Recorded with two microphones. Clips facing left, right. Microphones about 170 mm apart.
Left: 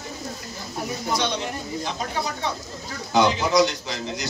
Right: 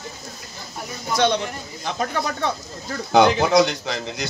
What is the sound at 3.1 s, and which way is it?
Speech, 55° right (ahead or behind).